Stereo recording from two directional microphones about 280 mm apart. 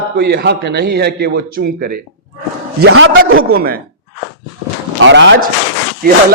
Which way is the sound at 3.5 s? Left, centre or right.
Right.